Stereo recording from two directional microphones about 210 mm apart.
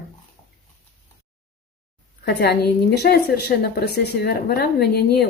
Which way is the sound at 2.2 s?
50° left (ahead or behind).